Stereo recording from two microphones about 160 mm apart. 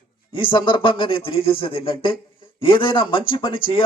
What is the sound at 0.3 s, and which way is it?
A man's voice, 30° left (ahead or behind).